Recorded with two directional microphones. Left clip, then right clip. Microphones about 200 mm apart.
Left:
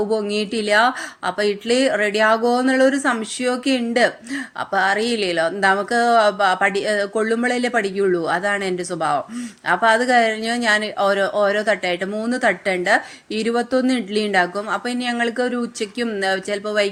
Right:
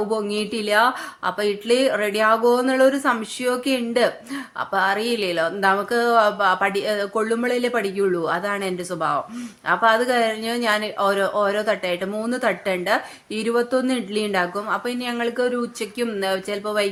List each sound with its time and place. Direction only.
0.1 s a woman's voice: 15° left (ahead or behind)